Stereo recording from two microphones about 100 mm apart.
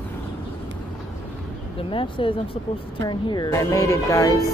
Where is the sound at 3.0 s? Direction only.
50° left (ahead or behind).